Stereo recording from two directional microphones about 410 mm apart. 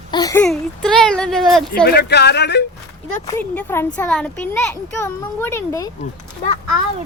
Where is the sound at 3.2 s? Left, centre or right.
Centre.